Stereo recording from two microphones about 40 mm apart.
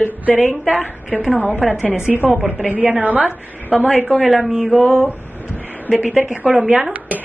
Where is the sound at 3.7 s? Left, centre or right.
Centre.